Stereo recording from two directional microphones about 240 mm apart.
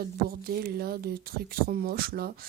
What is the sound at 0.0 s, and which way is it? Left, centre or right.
Speech, right.